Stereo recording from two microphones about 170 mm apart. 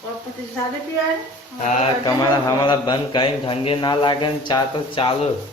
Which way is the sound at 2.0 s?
25° left (ahead or behind).